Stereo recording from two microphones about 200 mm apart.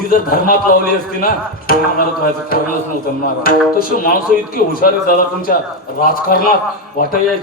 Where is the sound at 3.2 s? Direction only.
45° left (ahead or behind).